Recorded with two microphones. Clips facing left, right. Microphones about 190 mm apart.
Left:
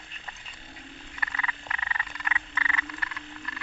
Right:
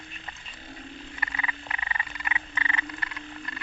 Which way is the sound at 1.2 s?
15° right (ahead or behind).